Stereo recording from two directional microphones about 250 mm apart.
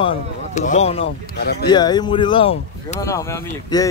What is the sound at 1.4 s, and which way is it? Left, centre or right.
Speech, left.